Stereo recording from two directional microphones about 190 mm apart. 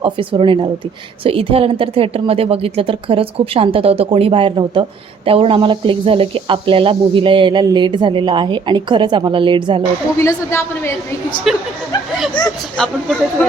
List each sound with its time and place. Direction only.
0.0 s a woman's voice: 25° right (ahead or behind)
10.2 s a woman's voice: 15° left (ahead or behind)
11.5 s speech: centre (ahead or behind)